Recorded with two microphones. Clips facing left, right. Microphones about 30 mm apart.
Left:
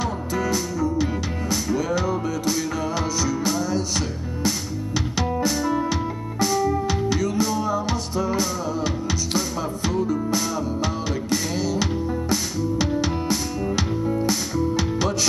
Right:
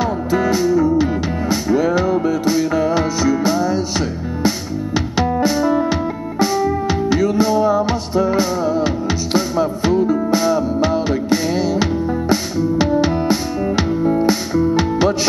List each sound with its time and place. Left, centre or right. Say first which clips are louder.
0.3 s music: right 11 dB; right